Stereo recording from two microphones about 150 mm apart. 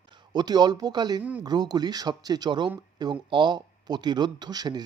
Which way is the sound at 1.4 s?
30° right (ahead or behind).